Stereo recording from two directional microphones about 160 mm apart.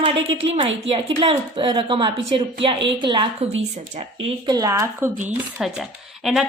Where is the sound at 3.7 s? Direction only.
45° right (ahead or behind).